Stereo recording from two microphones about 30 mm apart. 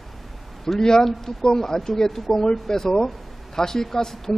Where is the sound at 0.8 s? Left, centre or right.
Left.